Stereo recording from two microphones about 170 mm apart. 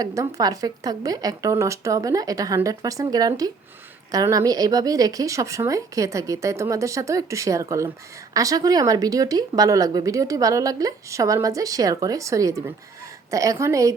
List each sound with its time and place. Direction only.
0.0 s speech: 20° right (ahead or behind)